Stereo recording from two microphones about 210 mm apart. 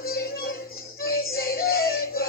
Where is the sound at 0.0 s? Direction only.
45° left (ahead or behind).